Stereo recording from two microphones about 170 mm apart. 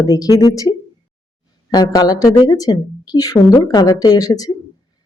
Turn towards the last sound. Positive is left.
turn(degrees=20)  # may be behind; listen again after turning